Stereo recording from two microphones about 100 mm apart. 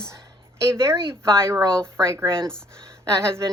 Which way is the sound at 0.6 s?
30° right (ahead or behind).